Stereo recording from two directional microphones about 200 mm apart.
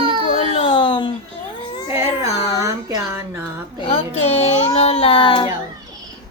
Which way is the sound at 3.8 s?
30° left (ahead or behind).